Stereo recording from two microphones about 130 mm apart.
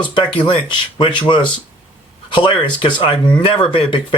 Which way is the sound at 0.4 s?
40° left (ahead or behind).